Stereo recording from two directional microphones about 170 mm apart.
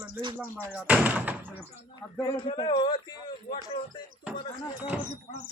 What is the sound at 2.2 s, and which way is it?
A man's voice, 25° left (ahead or behind).